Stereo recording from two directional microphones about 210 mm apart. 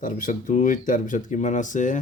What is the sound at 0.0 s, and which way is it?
Speech, 40° left (ahead or behind).